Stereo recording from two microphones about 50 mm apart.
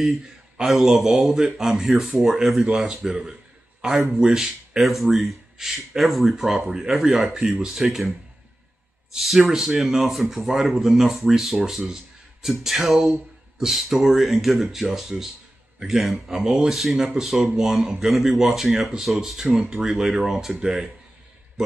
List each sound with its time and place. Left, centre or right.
0.7 s speech: centre
20.2 s speech: centre